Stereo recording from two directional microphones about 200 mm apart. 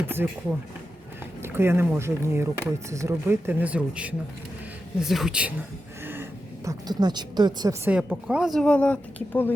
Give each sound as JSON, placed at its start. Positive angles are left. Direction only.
{"t": 1.4, "sound": "speech", "side_deg": -10}
{"t": 6.7, "sound": "a woman's voice", "side_deg": -20}
{"t": 7.9, "sound": "speech", "side_deg": -5}